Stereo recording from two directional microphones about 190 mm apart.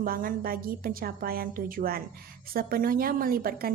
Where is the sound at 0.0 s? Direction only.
50° right (ahead or behind).